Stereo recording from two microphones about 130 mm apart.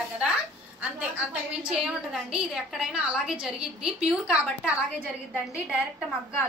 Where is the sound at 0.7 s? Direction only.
10° right (ahead or behind).